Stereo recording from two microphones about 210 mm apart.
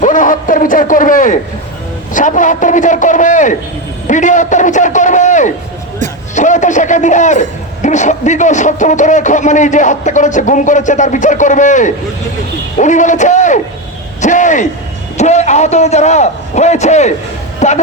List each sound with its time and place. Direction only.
0.0 s a man's voice: 40° left (ahead or behind)